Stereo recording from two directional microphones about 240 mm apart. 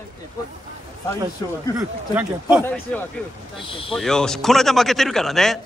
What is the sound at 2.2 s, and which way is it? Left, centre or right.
Speech, centre.